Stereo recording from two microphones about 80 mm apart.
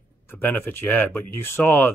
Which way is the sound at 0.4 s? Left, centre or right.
Left.